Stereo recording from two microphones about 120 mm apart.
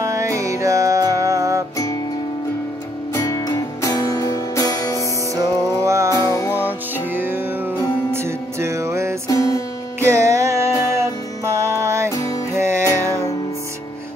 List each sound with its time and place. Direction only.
0.0 s music: 25° right (ahead or behind)
3.2 s music: 30° left (ahead or behind)
5.3 s music: 25° right (ahead or behind)
6.2 s music: 30° left (ahead or behind)
7.1 s music: 15° right (ahead or behind)
9.3 s music: 25° left (ahead or behind)
9.9 s music: 25° right (ahead or behind)
12.1 s music: 30° left (ahead or behind)
12.5 s music: 20° right (ahead or behind)
13.0 s music: 25° left (ahead or behind)